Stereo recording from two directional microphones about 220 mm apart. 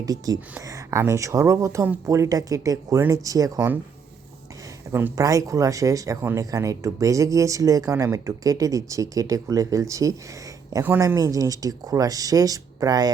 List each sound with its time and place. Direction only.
0.0 s speech: 15° right (ahead or behind)
4.9 s speech: 10° right (ahead or behind)